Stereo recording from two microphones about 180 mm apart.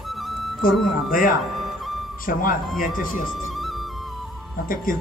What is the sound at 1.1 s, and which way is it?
Speech, 50° left (ahead or behind).